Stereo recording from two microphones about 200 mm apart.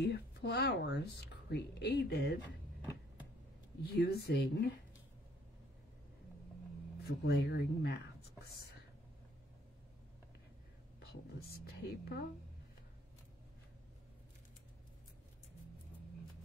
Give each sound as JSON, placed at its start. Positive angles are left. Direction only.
{"t": 0.0, "sound": "speech", "side_deg": 55}
{"t": 3.8, "sound": "speech", "side_deg": 55}
{"t": 7.1, "sound": "speech", "side_deg": 55}
{"t": 11.3, "sound": "music", "side_deg": 50}